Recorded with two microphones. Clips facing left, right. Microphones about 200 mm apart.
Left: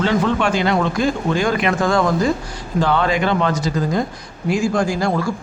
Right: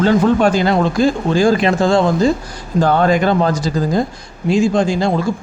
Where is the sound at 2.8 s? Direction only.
45° right (ahead or behind); by 5.3 s 25° right (ahead or behind).